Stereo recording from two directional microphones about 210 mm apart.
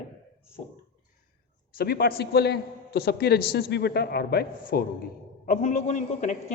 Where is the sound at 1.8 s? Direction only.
45° left (ahead or behind).